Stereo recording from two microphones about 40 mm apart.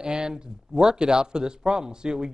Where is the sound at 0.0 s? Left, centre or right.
Centre.